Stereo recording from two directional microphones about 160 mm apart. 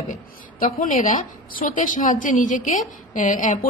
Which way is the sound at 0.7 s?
55° left (ahead or behind).